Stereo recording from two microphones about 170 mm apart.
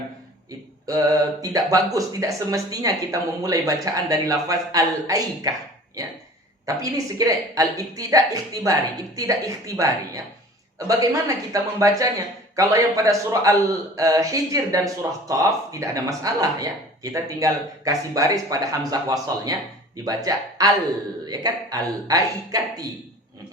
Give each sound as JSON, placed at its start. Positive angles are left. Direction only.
{"t": 1.4, "sound": "speech", "side_deg": -20}
{"t": 6.7, "sound": "speech", "side_deg": -20}